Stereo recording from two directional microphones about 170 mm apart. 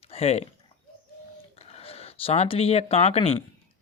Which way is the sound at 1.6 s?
35° left (ahead or behind).